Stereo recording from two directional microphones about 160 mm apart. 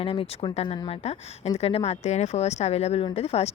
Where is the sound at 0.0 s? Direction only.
35° left (ahead or behind).